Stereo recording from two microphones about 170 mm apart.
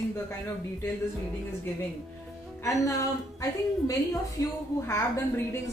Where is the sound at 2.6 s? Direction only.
20° left (ahead or behind).